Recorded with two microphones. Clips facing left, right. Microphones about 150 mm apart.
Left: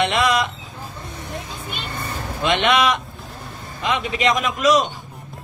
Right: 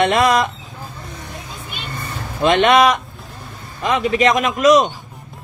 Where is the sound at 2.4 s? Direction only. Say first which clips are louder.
Right 6 dB; 45° right (ahead or behind).